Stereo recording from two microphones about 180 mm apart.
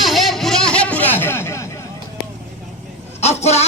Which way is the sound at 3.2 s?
35° left (ahead or behind).